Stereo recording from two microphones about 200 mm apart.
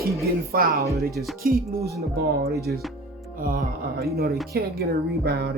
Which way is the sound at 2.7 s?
50° right (ahead or behind).